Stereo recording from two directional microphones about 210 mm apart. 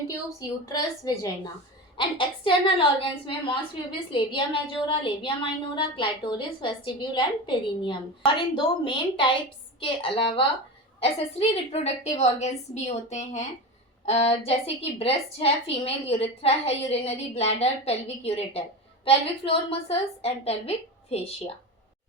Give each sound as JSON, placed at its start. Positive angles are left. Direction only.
{"t": 0.3, "sound": "a woman's voice", "side_deg": 15}